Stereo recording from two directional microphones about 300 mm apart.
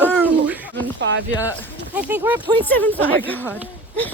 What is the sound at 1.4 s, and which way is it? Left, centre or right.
Speech, centre.